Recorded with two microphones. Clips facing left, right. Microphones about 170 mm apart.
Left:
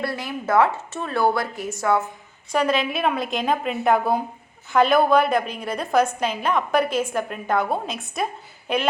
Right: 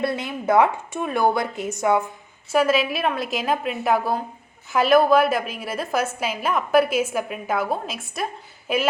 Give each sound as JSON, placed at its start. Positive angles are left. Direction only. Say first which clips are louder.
{"t": 0.0, "sound": "a woman's voice", "louder": "right 3 dB", "side_deg": -20}
{"t": 2.5, "sound": "a woman's voice", "louder": "right 2 dB", "side_deg": -5}